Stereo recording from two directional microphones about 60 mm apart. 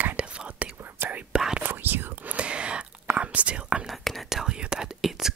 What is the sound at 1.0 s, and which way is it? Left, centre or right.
Whispering, right.